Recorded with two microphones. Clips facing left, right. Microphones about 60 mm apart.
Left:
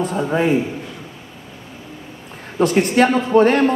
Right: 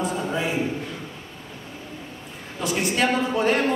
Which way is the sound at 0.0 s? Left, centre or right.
Left.